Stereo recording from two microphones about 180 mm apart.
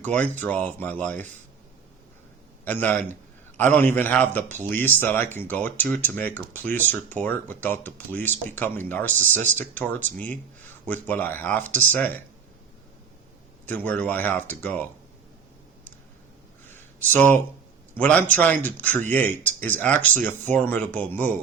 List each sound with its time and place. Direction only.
0.0 s speech: 10° left (ahead or behind)
2.6 s speech: 10° left (ahead or behind)
13.7 s speech: 10° left (ahead or behind)
16.6 s a sound: 10° left (ahead or behind)
17.9 s speech: 10° left (ahead or behind)